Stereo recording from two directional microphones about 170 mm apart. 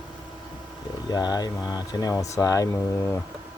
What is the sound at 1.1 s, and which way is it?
Speech, 25° left (ahead or behind).